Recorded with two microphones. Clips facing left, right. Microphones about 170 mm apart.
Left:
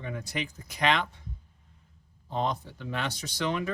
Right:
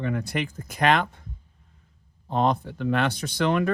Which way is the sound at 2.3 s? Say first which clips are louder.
Right 7 dB; 60° right (ahead or behind).